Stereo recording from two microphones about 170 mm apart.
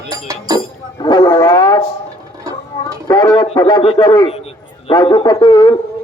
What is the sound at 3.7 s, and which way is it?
A man's voice, 30° left (ahead or behind).